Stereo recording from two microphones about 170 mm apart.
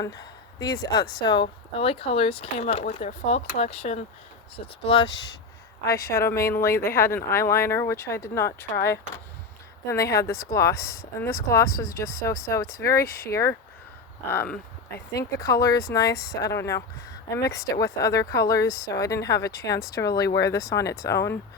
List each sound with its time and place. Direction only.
0.0 s a woman's voice: 25° left (ahead or behind)
9.9 s speech: 20° left (ahead or behind)
15.1 s speech: 20° left (ahead or behind)